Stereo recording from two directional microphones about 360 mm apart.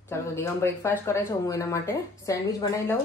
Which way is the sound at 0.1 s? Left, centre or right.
Centre.